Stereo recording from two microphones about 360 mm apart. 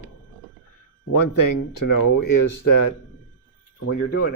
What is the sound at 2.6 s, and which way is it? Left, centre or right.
Speech, left.